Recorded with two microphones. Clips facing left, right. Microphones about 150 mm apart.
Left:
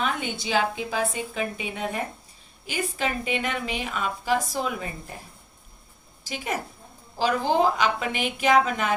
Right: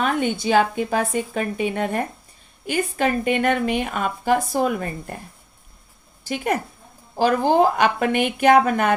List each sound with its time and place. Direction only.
0.0 s a woman's voice: 50° right (ahead or behind)
6.2 s a woman's voice: 55° right (ahead or behind)